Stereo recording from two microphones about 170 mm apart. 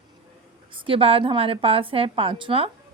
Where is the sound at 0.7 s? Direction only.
30° right (ahead or behind).